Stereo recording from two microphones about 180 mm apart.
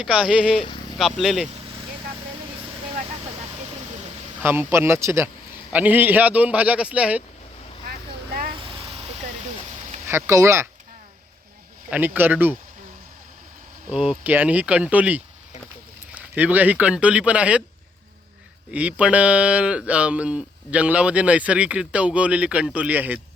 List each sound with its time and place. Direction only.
0.0 s speech: 5° right (ahead or behind)
4.4 s speech: 15° right (ahead or behind)
8.6 s vehicle: 35° right (ahead or behind)
10.1 s speech: 15° right (ahead or behind)
11.9 s speech: 10° right (ahead or behind)
13.9 s speech: 5° right (ahead or behind)
18.7 s speech: 5° right (ahead or behind)